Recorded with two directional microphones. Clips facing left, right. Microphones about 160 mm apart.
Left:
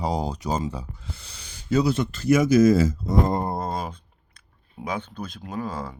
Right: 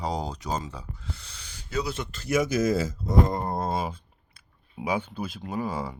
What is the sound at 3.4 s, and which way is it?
Speech, centre (ahead or behind).